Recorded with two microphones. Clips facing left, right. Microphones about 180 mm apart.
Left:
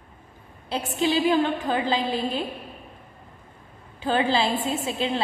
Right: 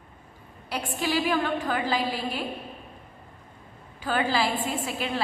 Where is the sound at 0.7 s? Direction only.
20° left (ahead or behind).